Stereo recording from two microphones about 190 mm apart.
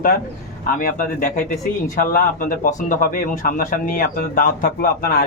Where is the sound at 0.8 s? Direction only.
45° left (ahead or behind).